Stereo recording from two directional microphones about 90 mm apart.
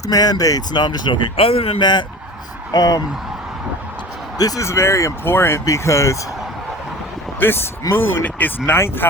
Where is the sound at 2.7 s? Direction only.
45° left (ahead or behind).